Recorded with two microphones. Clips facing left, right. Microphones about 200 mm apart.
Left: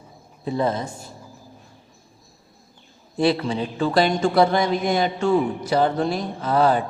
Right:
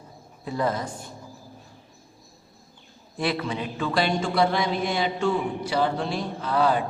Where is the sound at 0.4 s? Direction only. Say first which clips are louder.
Left 3 dB; 25° left (ahead or behind).